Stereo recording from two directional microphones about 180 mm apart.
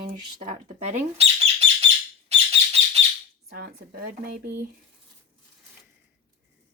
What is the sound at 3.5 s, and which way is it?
Speech, 60° right (ahead or behind).